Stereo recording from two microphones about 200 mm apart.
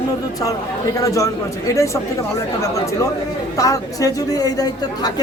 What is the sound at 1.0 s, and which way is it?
Speech, 15° left (ahead or behind).